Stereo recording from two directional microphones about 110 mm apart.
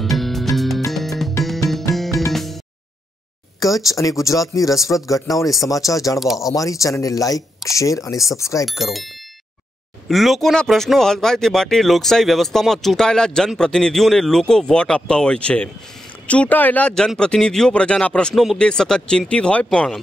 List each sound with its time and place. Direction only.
0.0 s music: centre (ahead or behind)
1.9 s music: 30° left (ahead or behind)
2.3 s music: centre (ahead or behind)
3.8 s speech: 30° left (ahead or behind)
6.1 s speech: centre (ahead or behind)
6.4 s speech: 30° left (ahead or behind)
8.6 s speech: centre (ahead or behind)
10.0 s speech: centre (ahead or behind)